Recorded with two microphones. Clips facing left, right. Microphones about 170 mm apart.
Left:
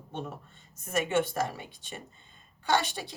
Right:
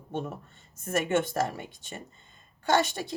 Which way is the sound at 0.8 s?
50° right (ahead or behind).